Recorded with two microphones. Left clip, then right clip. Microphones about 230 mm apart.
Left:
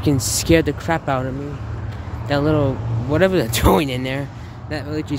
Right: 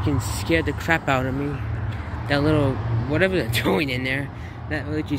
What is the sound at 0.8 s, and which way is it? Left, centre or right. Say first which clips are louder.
Speech: even; centre.